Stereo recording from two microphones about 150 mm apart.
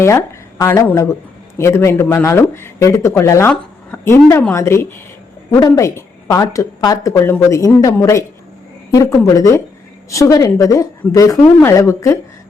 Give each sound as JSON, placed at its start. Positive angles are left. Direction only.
{"t": 0.0, "sound": "speech", "side_deg": 20}